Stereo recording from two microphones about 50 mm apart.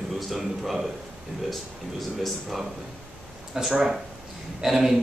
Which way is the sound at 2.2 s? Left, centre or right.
Centre.